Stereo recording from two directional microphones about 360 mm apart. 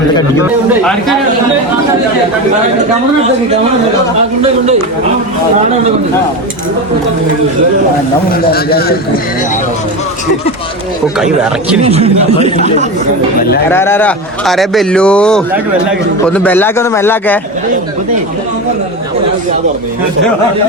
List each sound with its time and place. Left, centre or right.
0.7 s a man's voice: centre
8.3 s a man's voice: left
11.8 s speech: centre
13.7 s a man's voice: centre